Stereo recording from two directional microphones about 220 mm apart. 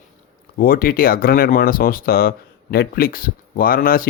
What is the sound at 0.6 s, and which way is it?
Speech, 40° left (ahead or behind).